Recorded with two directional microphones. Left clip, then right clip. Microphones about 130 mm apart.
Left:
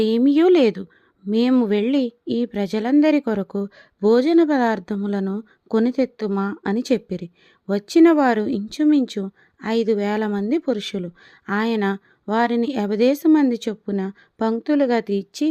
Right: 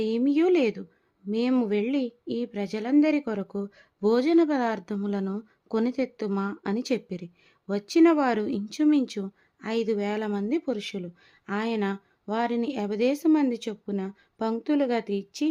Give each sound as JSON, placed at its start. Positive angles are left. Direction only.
{"t": 0.2, "sound": "speech", "side_deg": 55}